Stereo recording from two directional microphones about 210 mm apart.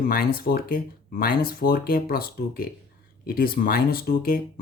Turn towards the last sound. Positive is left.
turn(degrees=45)  # may be behind; listen again after turning